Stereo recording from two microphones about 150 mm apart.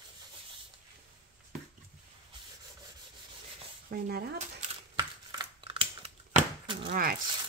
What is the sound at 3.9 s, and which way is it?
Speech, 90° right.